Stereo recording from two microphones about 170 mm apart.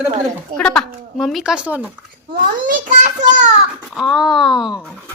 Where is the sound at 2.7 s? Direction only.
50° right (ahead or behind).